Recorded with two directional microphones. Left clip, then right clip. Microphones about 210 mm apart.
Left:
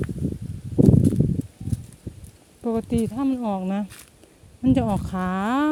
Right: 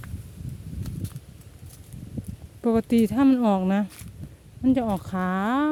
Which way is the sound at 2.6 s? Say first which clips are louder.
Right 3 dB; 15° right (ahead or behind).